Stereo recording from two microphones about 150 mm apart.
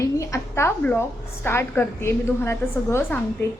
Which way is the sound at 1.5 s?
15° left (ahead or behind).